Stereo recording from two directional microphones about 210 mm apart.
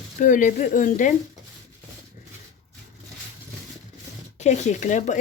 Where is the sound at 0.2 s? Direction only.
40° left (ahead or behind).